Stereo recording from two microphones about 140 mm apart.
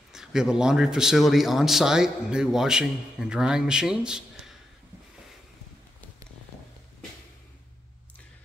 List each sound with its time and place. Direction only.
0.1 s a man's voice: 5° right (ahead or behind)